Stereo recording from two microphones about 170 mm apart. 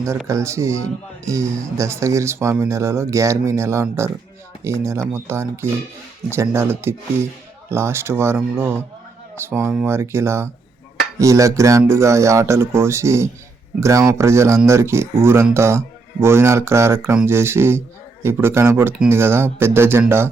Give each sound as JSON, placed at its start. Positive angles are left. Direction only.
{"t": 0.3, "sound": "speech", "side_deg": -15}